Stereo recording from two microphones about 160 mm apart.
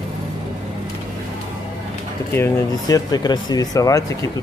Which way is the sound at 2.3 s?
20° left (ahead or behind).